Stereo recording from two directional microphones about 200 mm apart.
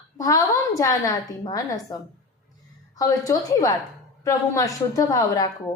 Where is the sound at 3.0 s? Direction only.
15° left (ahead or behind).